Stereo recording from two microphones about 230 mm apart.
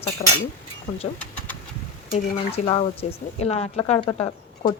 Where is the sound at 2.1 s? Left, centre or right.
Left.